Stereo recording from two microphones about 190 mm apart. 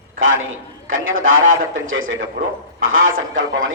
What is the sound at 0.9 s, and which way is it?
A man's voice, 90° right.